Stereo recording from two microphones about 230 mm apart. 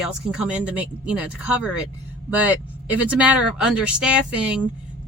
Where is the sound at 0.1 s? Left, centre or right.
Centre.